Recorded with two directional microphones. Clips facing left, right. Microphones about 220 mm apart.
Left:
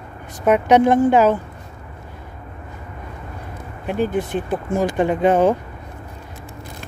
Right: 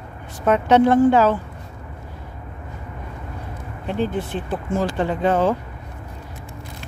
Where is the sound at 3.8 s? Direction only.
10° left (ahead or behind).